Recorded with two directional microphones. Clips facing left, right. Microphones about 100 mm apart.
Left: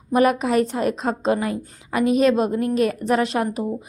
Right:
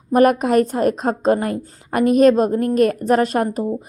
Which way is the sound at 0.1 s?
50° right (ahead or behind).